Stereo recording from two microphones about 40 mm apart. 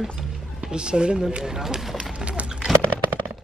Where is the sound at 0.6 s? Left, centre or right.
Right.